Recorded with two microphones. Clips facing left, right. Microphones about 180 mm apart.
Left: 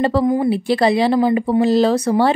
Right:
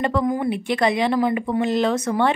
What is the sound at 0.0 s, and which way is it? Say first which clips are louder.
Speech: left 5 dB; 30° left (ahead or behind).